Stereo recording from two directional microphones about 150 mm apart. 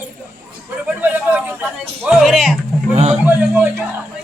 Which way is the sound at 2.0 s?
5° right (ahead or behind).